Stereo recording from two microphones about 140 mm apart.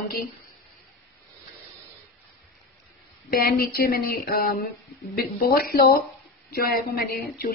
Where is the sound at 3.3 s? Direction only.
90° left.